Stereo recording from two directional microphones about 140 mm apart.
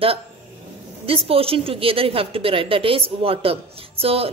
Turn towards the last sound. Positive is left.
turn(degrees=-45)  # may be behind; listen again after turning